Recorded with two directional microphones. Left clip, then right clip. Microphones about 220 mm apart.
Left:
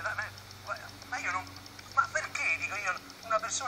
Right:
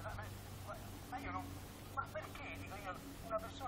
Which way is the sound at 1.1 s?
20° left (ahead or behind).